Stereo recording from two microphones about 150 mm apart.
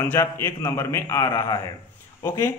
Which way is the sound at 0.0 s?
15° left (ahead or behind).